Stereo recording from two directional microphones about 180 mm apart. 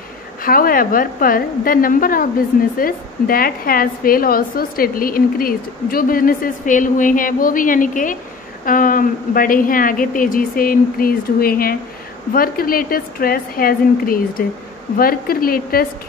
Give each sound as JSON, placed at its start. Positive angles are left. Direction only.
{"t": 0.4, "sound": "a woman's voice", "side_deg": 50}